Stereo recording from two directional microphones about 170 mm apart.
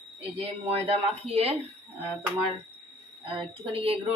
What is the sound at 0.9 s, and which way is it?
Speech, 40° right (ahead or behind).